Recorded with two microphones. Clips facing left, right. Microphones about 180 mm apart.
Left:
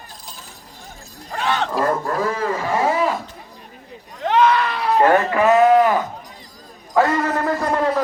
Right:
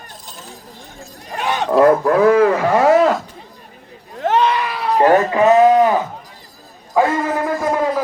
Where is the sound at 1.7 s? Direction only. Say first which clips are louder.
Right 9 dB; 60° right (ahead or behind).